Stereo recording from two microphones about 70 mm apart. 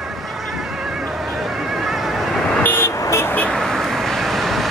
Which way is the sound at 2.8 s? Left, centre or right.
Left.